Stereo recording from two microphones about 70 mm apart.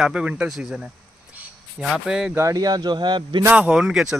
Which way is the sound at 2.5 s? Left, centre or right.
Right.